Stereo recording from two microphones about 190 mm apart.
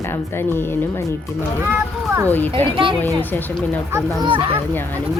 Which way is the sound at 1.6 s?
15° right (ahead or behind).